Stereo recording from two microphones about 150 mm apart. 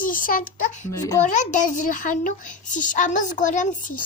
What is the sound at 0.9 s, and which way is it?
Speech, 25° left (ahead or behind).